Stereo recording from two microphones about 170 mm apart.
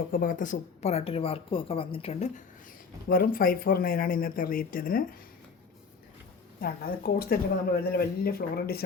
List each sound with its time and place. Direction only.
0.1 s speech: 55° left (ahead or behind)
3.1 s speech: 60° left (ahead or behind)
6.6 s speech: 60° left (ahead or behind)